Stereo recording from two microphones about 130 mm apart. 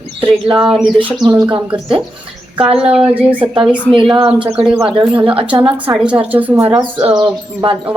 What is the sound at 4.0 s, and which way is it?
Speech, 45° right (ahead or behind).